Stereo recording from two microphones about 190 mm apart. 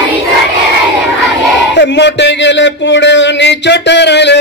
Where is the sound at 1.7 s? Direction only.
65° left (ahead or behind).